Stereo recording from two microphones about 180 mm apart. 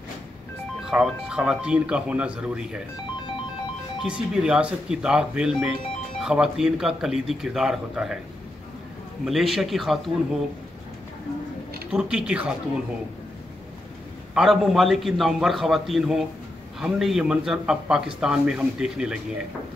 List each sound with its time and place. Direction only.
0.8 s speech: 5° right (ahead or behind)
4.0 s speech: 5° right (ahead or behind)
9.2 s speech: centre (ahead or behind)
11.9 s speech: 5° right (ahead or behind)
14.3 s speech: centre (ahead or behind)